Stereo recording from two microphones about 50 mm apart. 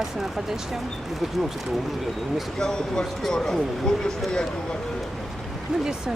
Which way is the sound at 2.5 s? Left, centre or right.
Centre.